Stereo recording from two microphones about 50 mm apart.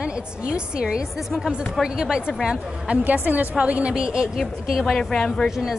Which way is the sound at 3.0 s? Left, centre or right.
Right.